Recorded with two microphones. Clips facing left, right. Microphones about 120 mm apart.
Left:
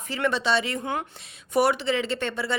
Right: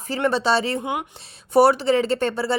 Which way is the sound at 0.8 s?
15° right (ahead or behind).